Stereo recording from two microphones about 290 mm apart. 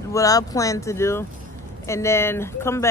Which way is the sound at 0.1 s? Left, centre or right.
Centre.